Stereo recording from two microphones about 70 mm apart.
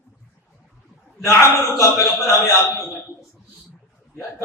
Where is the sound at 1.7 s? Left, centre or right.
Left.